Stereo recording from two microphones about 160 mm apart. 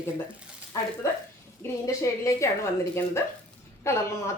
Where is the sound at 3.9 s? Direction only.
15° left (ahead or behind).